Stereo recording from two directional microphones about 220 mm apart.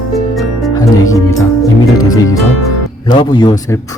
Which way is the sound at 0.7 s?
15° left (ahead or behind).